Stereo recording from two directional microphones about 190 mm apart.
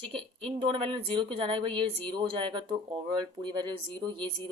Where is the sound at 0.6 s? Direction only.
30° right (ahead or behind).